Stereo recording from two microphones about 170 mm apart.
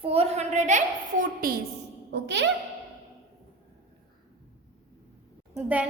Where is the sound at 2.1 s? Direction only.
90° right.